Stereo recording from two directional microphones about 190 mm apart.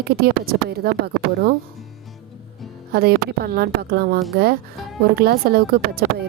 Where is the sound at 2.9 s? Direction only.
55° right (ahead or behind).